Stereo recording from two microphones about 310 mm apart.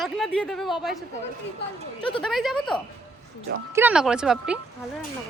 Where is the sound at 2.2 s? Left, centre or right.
Centre.